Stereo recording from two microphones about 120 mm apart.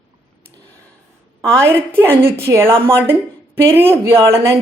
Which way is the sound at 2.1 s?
20° right (ahead or behind).